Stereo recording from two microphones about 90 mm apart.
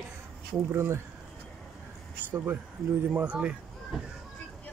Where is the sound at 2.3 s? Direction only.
25° right (ahead or behind).